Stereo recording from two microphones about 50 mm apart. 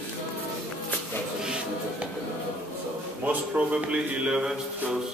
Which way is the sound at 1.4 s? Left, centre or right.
Centre.